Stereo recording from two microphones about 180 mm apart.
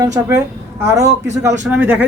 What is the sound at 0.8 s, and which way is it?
Speech, 20° right (ahead or behind).